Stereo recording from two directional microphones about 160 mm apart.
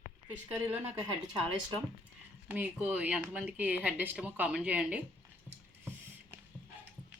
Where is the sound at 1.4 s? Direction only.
30° right (ahead or behind).